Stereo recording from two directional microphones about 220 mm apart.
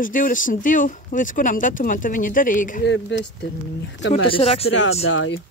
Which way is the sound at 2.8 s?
55° left (ahead or behind).